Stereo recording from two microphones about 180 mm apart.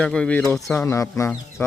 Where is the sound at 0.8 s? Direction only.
15° left (ahead or behind).